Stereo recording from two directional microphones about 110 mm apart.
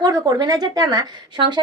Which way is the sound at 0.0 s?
35° right (ahead or behind).